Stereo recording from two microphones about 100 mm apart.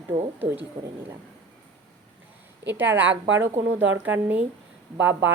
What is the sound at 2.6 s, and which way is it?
Speech, 20° right (ahead or behind).